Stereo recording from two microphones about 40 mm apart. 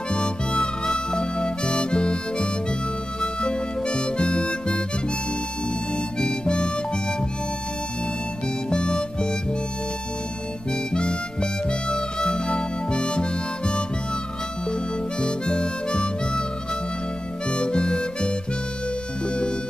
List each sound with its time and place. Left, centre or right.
0.1 s harmonica: left
6.1 s harmonica: left
8.6 s harmonica: left
10.9 s harmonica: left
17.5 s harmonica: left
19.2 s music: left